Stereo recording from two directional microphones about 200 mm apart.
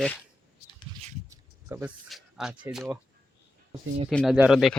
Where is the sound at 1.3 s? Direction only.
15° right (ahead or behind).